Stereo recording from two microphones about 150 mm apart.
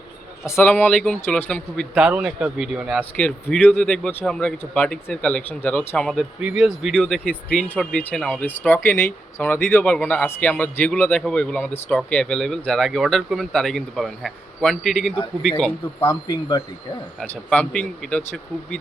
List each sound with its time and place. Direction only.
0.4 s speech: 15° left (ahead or behind)
2.0 s a man's voice: 10° right (ahead or behind)
3.0 s speech: 10° left (ahead or behind)
16.0 s speech: 30° left (ahead or behind)
17.2 s speech: 5° left (ahead or behind)